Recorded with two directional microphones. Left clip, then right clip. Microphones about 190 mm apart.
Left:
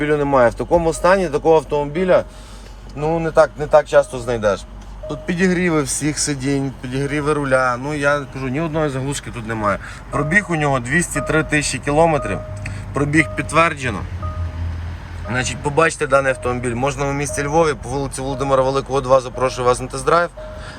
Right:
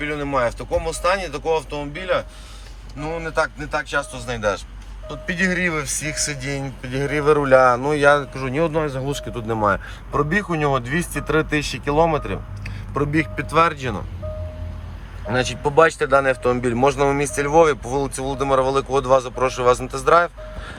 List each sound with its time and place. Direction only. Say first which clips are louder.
0.0 s speech: left 7 dB; 45° left (ahead or behind)
3.2 s speech: left 7 dB; 25° left (ahead or behind)
3.8 s speech: left 9 dB; 45° left (ahead or behind)
4.4 s speech: left 3 dB; 25° left (ahead or behind); by 14.0 s centre (ahead or behind)
15.7 s speech: even; 5° left (ahead or behind)